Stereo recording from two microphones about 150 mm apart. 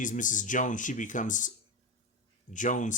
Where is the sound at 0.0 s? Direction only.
60° left (ahead or behind).